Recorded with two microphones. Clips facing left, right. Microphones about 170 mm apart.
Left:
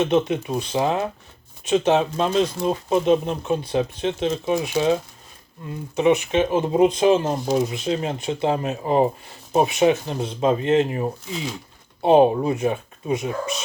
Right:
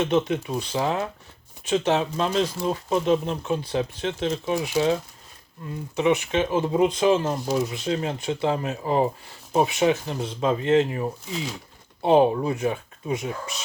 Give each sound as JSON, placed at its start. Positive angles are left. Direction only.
{"t": 0.0, "sound": "speech", "side_deg": 20}
{"t": 6.0, "sound": "speech", "side_deg": 20}